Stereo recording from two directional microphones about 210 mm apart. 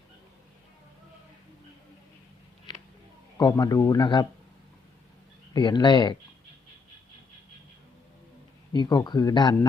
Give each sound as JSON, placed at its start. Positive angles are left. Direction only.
{"t": 3.3, "sound": "speech", "side_deg": 20}
{"t": 5.5, "sound": "speech", "side_deg": 20}
{"t": 8.7, "sound": "speech", "side_deg": 20}